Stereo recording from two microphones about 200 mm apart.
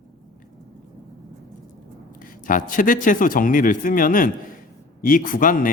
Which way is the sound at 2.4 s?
45° left (ahead or behind).